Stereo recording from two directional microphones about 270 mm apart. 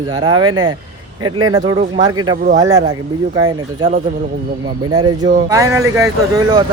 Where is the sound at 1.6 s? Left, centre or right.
Right.